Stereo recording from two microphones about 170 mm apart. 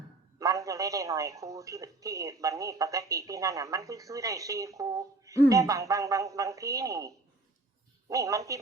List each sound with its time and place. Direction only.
0.3 s speech: 20° right (ahead or behind)
8.1 s speech: 20° right (ahead or behind)